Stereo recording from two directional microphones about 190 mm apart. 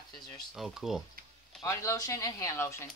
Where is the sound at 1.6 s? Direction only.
15° left (ahead or behind).